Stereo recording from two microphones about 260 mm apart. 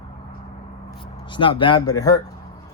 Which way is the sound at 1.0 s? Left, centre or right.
Centre.